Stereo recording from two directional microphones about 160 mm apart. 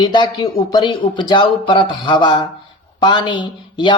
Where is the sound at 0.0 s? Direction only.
30° left (ahead or behind).